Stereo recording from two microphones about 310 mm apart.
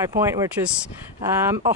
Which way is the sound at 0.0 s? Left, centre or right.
Centre.